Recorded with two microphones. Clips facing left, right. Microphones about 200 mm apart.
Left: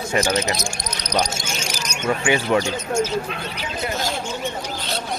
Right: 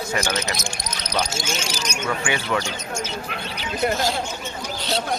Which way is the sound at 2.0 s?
25° left (ahead or behind).